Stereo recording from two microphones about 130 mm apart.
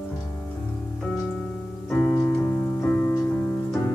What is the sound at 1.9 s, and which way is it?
Piano, 5° left (ahead or behind).